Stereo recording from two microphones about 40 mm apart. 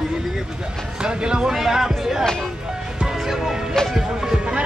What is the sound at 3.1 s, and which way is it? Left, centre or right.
Music, centre.